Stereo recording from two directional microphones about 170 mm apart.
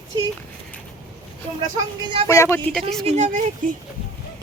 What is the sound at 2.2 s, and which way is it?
Speech, 20° left (ahead or behind).